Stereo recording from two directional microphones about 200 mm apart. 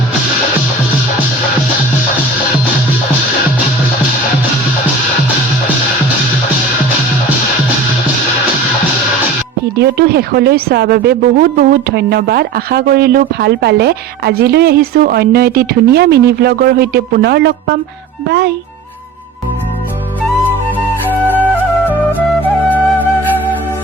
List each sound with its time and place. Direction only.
9.7 s a child's voice: 50° right (ahead or behind)
22.4 s flute: 10° left (ahead or behind)